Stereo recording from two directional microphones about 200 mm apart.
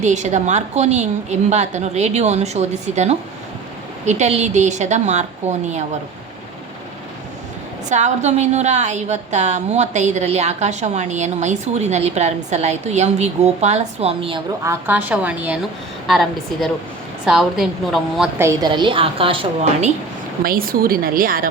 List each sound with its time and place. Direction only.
0.0 s a woman's voice: 35° right (ahead or behind)
7.9 s a woman's voice: 35° right (ahead or behind)
14.6 s a woman's voice: 10° right (ahead or behind)
18.4 s a woman's voice: 20° right (ahead or behind)
20.4 s a woman's voice: 45° right (ahead or behind)